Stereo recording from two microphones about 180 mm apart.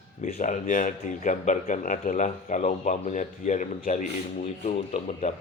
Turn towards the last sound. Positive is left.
turn(degrees=40)  # may be behind; listen again after turning